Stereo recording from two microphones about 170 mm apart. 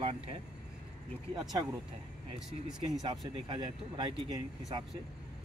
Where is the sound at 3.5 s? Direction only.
30° right (ahead or behind).